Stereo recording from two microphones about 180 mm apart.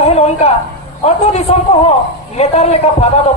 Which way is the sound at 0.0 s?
35° left (ahead or behind).